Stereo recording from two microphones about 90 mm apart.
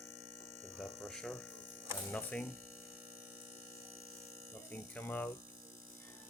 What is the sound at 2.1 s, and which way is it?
Speech, 25° left (ahead or behind).